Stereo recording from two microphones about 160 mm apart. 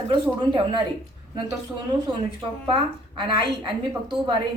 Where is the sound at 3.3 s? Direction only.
30° right (ahead or behind).